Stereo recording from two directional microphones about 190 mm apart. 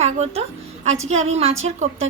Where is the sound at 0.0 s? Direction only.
35° right (ahead or behind).